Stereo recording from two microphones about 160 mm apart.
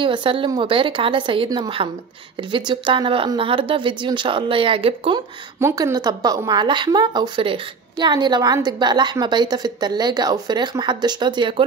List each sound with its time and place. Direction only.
0.0 s speech: 30° right (ahead or behind)
5.6 s a woman's voice: 15° right (ahead or behind)